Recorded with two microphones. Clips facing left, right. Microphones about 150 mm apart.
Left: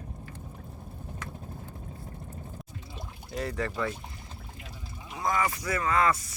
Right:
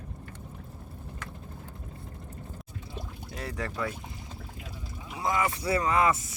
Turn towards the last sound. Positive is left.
turn(degrees=-20)  # may be behind; listen again after turning